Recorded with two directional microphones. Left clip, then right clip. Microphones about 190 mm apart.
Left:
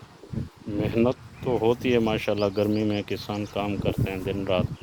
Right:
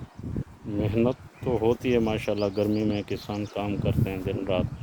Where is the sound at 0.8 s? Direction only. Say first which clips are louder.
Left 2 dB; centre (ahead or behind).